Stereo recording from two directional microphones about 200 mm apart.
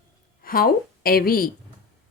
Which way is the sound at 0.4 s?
45° left (ahead or behind).